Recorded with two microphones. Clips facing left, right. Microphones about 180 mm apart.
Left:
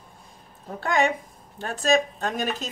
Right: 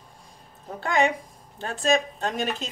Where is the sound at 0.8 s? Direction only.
Centre (ahead or behind).